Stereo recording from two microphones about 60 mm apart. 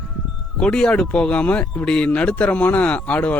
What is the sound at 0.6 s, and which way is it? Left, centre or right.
Speech, centre.